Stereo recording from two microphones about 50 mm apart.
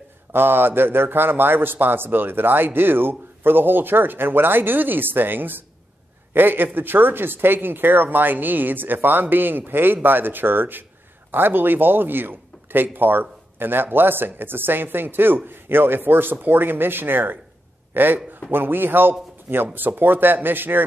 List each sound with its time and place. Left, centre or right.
0.3 s a man's voice: right